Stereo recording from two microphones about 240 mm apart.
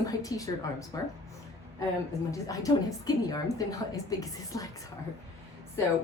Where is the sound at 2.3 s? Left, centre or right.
Centre.